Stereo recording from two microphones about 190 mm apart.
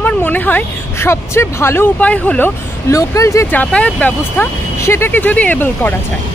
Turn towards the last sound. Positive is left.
turn(degrees=10)  # may be behind; listen again after turning